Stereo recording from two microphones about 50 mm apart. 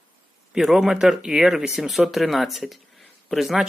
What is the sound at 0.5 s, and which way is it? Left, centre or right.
Speech, centre.